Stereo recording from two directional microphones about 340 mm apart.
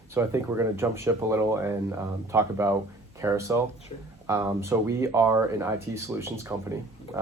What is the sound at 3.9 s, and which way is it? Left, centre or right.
Speech, centre.